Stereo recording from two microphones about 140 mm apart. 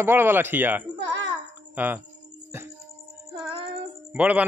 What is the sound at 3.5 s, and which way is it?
Child singing, 45° right (ahead or behind).